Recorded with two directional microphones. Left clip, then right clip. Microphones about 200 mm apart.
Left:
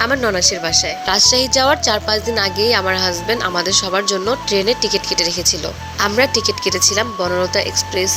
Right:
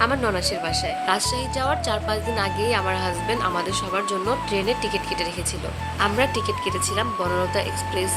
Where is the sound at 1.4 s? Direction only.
30° left (ahead or behind).